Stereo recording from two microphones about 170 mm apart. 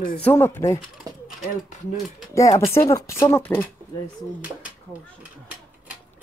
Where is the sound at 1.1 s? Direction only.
20° right (ahead or behind).